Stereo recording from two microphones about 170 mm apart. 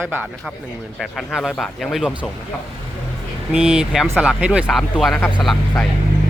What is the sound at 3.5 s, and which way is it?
Speech, 5° right (ahead or behind).